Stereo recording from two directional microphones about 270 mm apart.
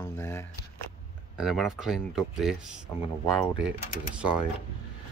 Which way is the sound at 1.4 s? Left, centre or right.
Centre.